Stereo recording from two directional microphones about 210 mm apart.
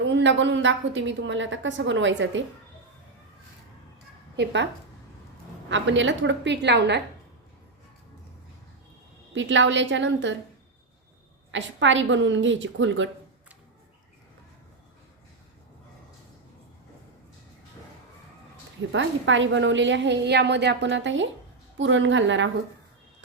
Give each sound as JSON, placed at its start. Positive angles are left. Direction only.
{"t": 0.0, "sound": "a woman's voice", "side_deg": -60}
{"t": 4.4, "sound": "a woman's voice", "side_deg": -55}
{"t": 9.3, "sound": "a woman's voice", "side_deg": -60}
{"t": 11.5, "sound": "a woman's voice", "side_deg": -60}
{"t": 18.9, "sound": "a woman's voice", "side_deg": -60}